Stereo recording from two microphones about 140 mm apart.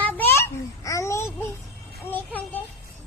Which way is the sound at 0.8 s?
20° left (ahead or behind).